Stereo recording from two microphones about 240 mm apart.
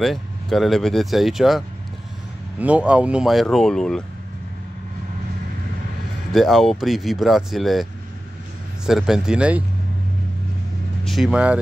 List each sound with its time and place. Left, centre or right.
0.0 s speech: centre
2.6 s speech: centre
6.3 s speech: centre
11.1 s speech: centre